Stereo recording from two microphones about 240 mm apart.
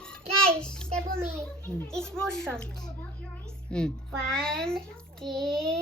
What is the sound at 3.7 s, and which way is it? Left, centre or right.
A child's voice, centre.